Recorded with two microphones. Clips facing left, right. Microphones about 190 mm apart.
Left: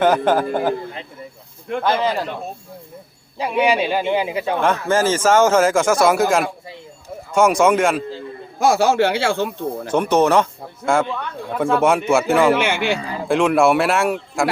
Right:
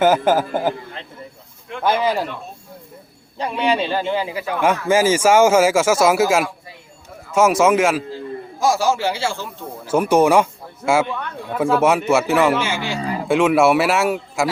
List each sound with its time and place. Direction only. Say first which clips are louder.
0.0 s speech: even; 5° right (ahead or behind)
1.8 s speech: right 1 dB; 10° right (ahead or behind)
3.3 s a man's voice: left 2 dB; 10° left (ahead or behind); by 4.6 s 25° left (ahead or behind)
4.6 s speech: right 3 dB; 10° right (ahead or behind)
8.5 s speech: left 3 dB; 60° left (ahead or behind)
9.8 s speech: right 2 dB; 5° right (ahead or behind)
12.5 s speech: left 3 dB; 60° left (ahead or behind)
13.2 s speech: even; 5° right (ahead or behind)